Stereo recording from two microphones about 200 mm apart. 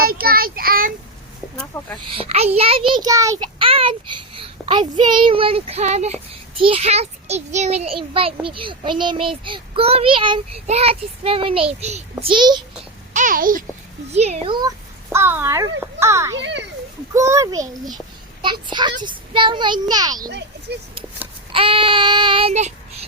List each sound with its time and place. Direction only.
0.0 s a child's voice: 50° right (ahead or behind)
1.7 s a woman's voice: 10° left (ahead or behind)
2.0 s a child's voice: 25° right (ahead or behind)
13.1 s a child's voice: 45° right (ahead or behind)
14.1 s a child's voice: 30° right (ahead or behind)
15.1 s speech: 10° right (ahead or behind)
16.4 s a child's voice: 60° right (ahead or behind)
17.2 s speech: 15° right (ahead or behind)
18.7 s a child's voice: 20° right (ahead or behind)
20.7 s a child's voice: 55° right (ahead or behind)
21.5 s child singing: 25° right (ahead or behind)